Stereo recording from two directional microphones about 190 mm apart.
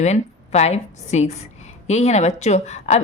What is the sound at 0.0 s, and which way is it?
A woman's voice, 35° left (ahead or behind).